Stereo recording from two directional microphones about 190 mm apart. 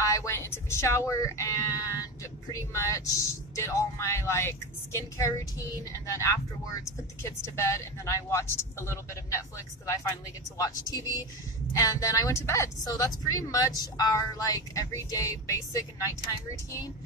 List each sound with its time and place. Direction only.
0.0 s speech: 15° left (ahead or behind)
10.6 s a woman's voice: 20° left (ahead or behind)